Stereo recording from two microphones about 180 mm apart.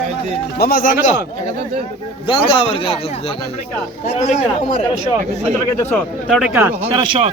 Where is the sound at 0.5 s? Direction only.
55° left (ahead or behind).